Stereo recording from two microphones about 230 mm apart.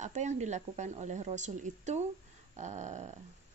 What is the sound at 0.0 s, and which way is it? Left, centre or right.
A woman's voice, right.